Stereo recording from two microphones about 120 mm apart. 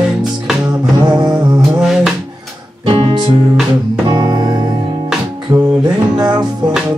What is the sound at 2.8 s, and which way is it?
Music, 40° right (ahead or behind).